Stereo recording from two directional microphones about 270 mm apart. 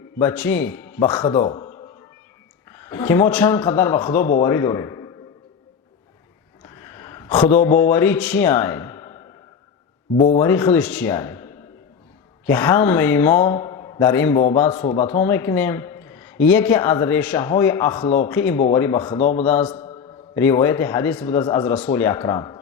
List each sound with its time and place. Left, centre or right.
0.2 s speech: centre
6.8 s a sound: centre
7.3 s speech: centre
10.2 s a man's voice: centre
12.5 s speech: centre
14.7 s a man's voice: left
19.5 s speech: centre
19.7 s a man's voice: centre